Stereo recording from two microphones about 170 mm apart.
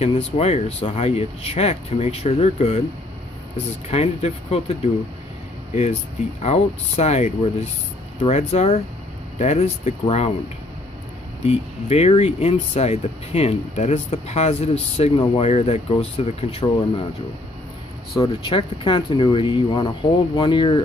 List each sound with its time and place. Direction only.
0.0 s speech: 35° left (ahead or behind)
3.9 s speech: 40° left (ahead or behind)
6.4 s speech: 40° left (ahead or behind)
11.4 s speech: 40° left (ahead or behind)
18.2 s speech: 30° left (ahead or behind)